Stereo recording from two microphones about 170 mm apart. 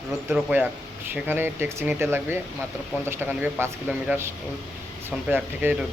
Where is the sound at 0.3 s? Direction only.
10° right (ahead or behind).